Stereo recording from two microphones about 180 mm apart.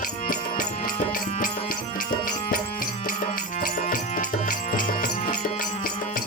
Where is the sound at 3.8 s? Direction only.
45° left (ahead or behind).